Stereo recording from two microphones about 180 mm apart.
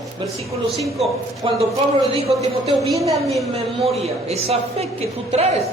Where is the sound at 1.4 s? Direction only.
30° right (ahead or behind).